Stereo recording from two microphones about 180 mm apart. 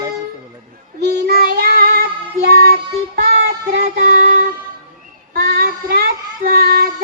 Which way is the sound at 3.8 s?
50° right (ahead or behind).